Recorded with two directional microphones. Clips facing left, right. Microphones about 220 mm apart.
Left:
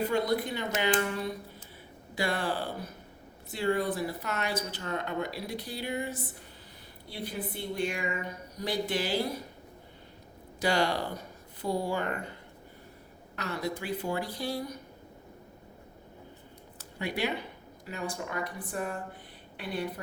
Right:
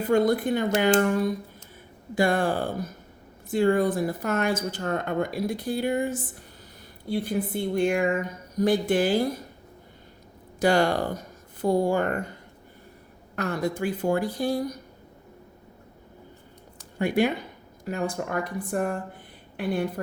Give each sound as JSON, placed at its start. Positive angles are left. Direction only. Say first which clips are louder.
{"t": 0.1, "sound": "speech", "louder": "right 7 dB", "side_deg": -50}
{"t": 10.6, "sound": "speech", "louder": "right 6 dB", "side_deg": -50}
{"t": 13.3, "sound": "speech", "louder": "right 7 dB", "side_deg": -50}
{"t": 17.0, "sound": "speech", "louder": "right 9 dB", "side_deg": -50}